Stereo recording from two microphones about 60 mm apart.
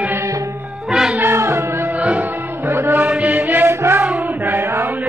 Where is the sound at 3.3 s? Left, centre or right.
Right.